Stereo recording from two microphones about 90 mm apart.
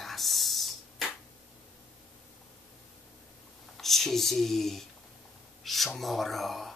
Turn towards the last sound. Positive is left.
turn(degrees=0)  # may be behind; listen again after turning